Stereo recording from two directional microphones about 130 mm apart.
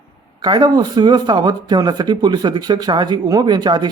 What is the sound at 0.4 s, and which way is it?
Speech, 35° right (ahead or behind).